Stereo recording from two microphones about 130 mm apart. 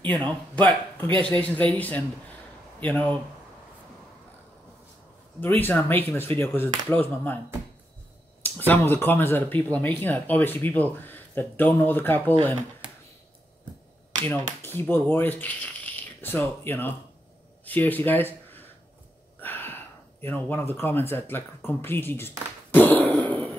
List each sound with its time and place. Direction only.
0.0 s speech: 10° left (ahead or behind)
5.4 s speech: 15° left (ahead or behind)
8.4 s speech: 15° left (ahead or behind)
14.2 s speech: 15° left (ahead or behind)
19.4 s a sound: 15° left (ahead or behind)